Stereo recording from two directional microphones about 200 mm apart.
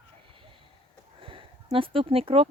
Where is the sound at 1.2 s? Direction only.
25° right (ahead or behind).